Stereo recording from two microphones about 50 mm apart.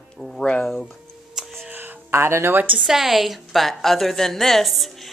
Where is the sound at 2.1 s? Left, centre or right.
Right.